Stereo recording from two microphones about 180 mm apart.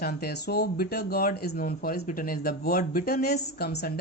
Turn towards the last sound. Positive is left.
turn(degrees=65)  # may be behind; listen again after turning